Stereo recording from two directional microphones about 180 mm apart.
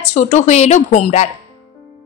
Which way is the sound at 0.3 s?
40° left (ahead or behind).